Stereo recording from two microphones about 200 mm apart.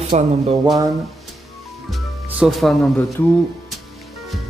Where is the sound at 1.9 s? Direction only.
Centre (ahead or behind).